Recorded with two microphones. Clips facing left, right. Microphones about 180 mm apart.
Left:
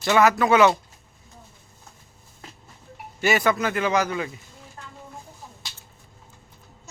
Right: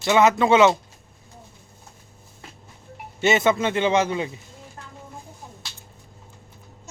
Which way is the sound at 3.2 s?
25° right (ahead or behind).